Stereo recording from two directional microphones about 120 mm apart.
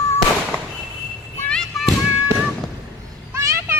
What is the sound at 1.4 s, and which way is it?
Fireworks, 5° left (ahead or behind).